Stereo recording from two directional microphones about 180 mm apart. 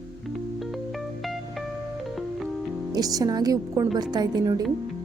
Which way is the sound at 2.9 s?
20° right (ahead or behind).